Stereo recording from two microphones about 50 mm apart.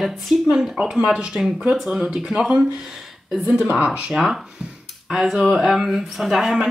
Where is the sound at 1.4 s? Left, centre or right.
Right.